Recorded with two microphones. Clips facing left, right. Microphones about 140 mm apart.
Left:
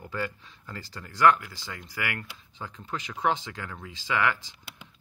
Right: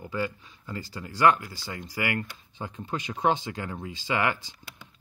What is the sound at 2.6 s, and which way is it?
Speech, 15° right (ahead or behind).